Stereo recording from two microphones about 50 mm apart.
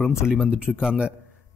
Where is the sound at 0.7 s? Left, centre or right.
Centre.